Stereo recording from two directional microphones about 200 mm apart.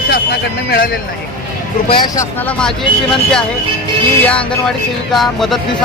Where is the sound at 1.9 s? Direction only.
20° left (ahead or behind).